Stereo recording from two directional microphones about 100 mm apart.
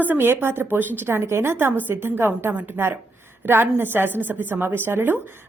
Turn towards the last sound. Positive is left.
turn(degrees=-20)  # may be behind; listen again after turning